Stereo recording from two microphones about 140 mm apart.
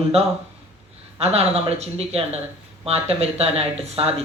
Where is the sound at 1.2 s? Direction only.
45° right (ahead or behind).